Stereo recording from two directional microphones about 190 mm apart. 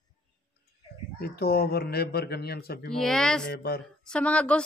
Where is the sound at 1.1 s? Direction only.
55° left (ahead or behind).